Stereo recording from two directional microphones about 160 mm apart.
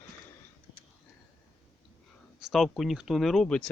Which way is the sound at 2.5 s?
Centre (ahead or behind).